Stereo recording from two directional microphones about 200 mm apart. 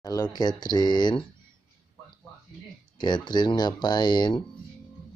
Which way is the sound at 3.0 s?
20° left (ahead or behind).